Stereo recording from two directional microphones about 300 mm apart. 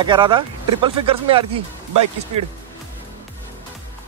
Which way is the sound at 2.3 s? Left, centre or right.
Right.